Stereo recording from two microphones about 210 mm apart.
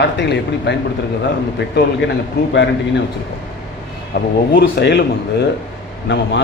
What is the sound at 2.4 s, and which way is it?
Speech, 50° left (ahead or behind).